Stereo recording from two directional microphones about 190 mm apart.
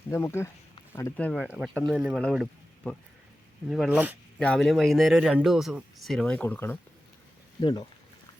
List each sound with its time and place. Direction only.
0.1 s speech: 15° left (ahead or behind)
7.6 s speech: 25° left (ahead or behind)